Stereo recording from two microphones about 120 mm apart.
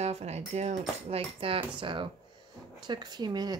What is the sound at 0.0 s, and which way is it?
Speech, 60° right (ahead or behind).